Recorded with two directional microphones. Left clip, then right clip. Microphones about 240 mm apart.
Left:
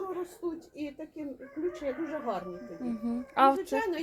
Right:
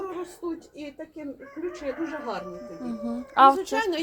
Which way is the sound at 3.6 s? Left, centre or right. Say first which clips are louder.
Right 4 dB; right.